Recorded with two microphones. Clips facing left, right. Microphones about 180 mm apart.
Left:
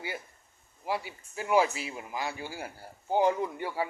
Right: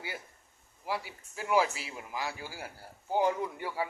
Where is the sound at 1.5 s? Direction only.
20° left (ahead or behind).